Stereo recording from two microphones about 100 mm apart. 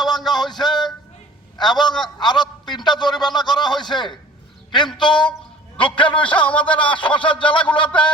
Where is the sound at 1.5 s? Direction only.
45° left (ahead or behind).